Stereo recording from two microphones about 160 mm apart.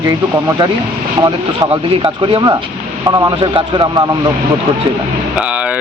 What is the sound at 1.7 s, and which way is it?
A man's voice, 35° right (ahead or behind).